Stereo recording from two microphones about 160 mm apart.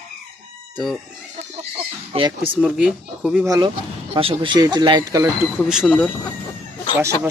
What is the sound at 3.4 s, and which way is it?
Speech, 20° right (ahead or behind).